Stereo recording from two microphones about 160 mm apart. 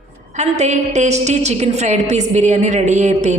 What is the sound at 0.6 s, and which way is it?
A woman's voice, 45° right (ahead or behind).